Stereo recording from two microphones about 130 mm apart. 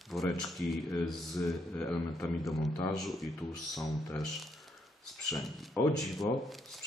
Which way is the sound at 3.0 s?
Centre (ahead or behind).